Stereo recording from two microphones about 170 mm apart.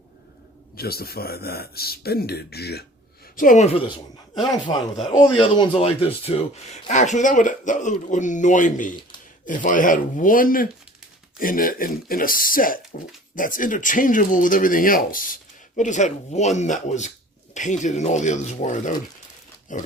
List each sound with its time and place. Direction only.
0.8 s a man's voice: 65° left (ahead or behind)
3.3 s a man's voice: 50° left (ahead or behind)